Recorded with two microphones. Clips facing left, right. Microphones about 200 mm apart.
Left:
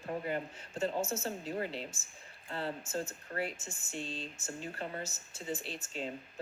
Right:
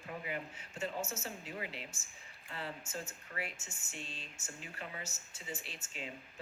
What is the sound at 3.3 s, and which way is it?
Speech, 55° left (ahead or behind).